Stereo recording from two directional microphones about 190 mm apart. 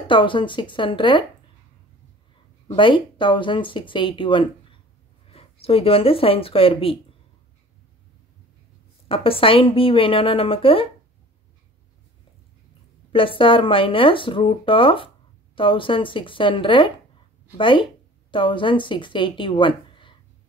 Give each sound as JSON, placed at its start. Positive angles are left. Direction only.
{"t": 0.1, "sound": "speech", "side_deg": 25}
{"t": 2.7, "sound": "speech", "side_deg": 25}
{"t": 9.1, "sound": "speech", "side_deg": 30}
{"t": 13.1, "sound": "speech", "side_deg": 25}